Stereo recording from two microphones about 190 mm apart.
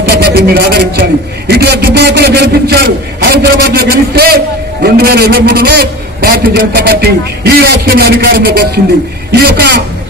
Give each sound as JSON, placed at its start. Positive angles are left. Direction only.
{"t": 0.0, "sound": "a man's voice", "side_deg": -60}